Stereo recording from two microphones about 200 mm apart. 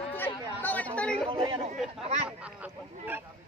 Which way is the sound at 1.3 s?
25° right (ahead or behind).